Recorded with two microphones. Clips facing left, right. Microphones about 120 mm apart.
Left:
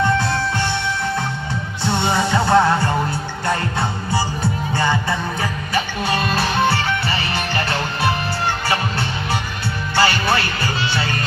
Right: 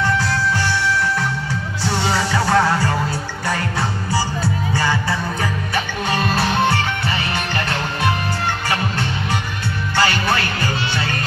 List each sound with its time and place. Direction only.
1.9 s music: 20° left (ahead or behind)
4.1 s music: 20° left (ahead or behind)
9.9 s music: 10° left (ahead or behind)